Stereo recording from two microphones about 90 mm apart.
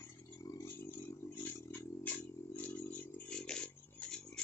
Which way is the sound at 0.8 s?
25° left (ahead or behind).